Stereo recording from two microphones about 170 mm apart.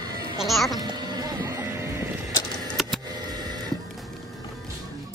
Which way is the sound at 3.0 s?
25° right (ahead or behind).